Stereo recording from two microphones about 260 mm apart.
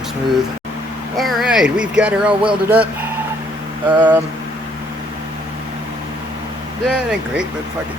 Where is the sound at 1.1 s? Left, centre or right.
Centre.